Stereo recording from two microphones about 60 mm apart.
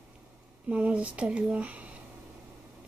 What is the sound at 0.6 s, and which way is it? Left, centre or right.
Speech, right.